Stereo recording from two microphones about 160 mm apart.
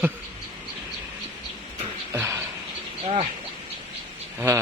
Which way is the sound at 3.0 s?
40° right (ahead or behind).